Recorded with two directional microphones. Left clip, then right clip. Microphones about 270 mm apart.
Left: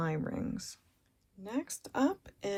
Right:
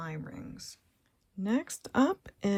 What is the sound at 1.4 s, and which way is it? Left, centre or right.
Speech, right.